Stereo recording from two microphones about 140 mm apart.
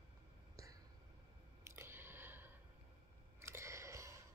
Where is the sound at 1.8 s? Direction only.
15° right (ahead or behind).